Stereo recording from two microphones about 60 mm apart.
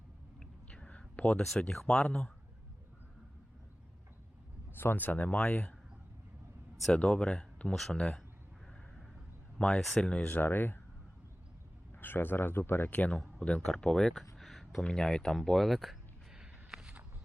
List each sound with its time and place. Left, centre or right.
0.3 s a sound: centre
1.9 s speech: centre
4.7 s speech: left
6.9 s speech: centre
7.7 s speech: centre
7.9 s speech: centre
9.6 s speech: centre
10.2 s speech: left
11.9 s speech: left
13.7 s speech: centre
14.3 s a sound: centre
14.8 s speech: centre
16.4 s a sound: centre